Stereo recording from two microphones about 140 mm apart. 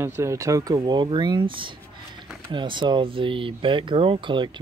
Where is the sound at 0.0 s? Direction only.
20° right (ahead or behind).